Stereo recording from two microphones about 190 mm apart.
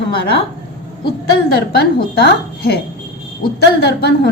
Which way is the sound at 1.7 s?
55° left (ahead or behind).